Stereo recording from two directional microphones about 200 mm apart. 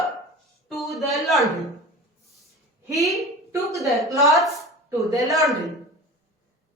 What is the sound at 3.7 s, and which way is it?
Speech, 15° right (ahead or behind).